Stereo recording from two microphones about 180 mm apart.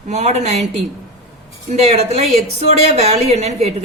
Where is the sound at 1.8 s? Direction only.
35° right (ahead or behind).